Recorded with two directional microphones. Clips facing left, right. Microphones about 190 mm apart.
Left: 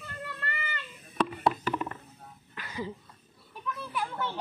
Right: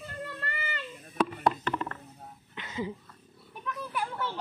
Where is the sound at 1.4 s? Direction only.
10° left (ahead or behind).